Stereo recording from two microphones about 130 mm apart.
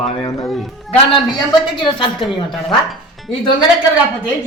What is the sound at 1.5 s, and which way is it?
Speech, 40° left (ahead or behind).